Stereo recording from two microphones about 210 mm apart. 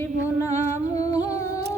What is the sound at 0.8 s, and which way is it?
Humming, 30° right (ahead or behind).